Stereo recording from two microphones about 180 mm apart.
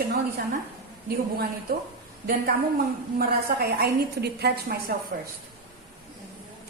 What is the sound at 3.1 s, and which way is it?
A woman's voice, 60° right (ahead or behind).